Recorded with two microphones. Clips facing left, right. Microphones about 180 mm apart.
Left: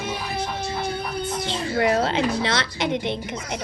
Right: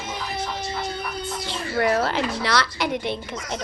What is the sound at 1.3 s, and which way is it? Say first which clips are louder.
Speech: left 2 dB; 20° left (ahead or behind).